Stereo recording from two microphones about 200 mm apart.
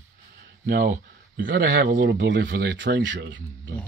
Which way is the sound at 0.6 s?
60° right (ahead or behind).